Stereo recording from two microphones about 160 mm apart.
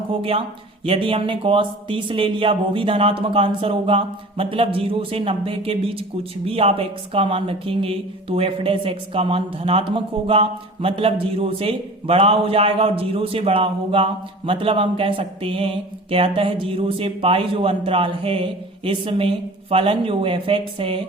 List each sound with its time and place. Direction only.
0.1 s speech: 35° right (ahead or behind)